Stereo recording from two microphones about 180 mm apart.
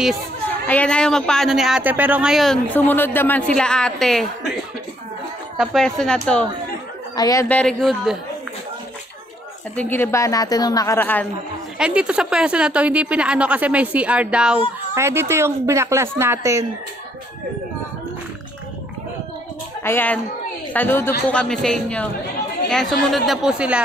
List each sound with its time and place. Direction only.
0.7 s speech: 5° left (ahead or behind)
5.6 s speech: centre (ahead or behind)
7.2 s speech: 20° left (ahead or behind)
7.4 s speech: 5° left (ahead or behind)
9.8 s a woman's voice: 10° left (ahead or behind)
11.8 s speech: 5° right (ahead or behind)
19.8 s a woman's voice: 10° left (ahead or behind); by 23.8 s 5° right (ahead or behind)